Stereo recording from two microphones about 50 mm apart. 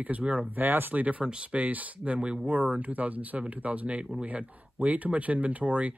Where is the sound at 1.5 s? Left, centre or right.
Right.